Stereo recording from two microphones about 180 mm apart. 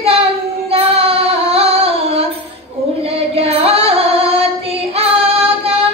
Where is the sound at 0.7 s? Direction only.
30° right (ahead or behind).